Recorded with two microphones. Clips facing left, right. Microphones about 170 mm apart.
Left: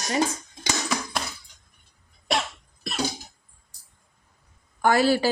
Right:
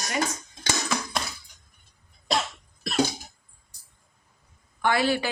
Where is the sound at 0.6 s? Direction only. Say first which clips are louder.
Left 1 dB; 5° left (ahead or behind).